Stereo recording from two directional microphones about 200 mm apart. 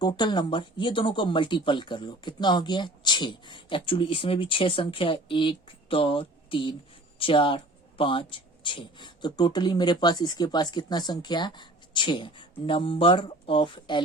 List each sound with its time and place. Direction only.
0.0 s speech: 20° left (ahead or behind)